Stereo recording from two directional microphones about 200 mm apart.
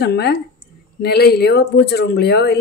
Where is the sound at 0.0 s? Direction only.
55° left (ahead or behind).